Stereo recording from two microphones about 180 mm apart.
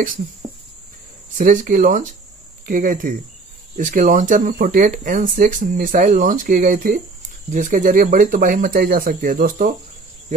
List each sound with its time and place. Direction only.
1.4 s speech: 45° right (ahead or behind)